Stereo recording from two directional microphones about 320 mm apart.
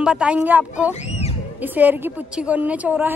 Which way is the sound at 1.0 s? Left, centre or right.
Centre.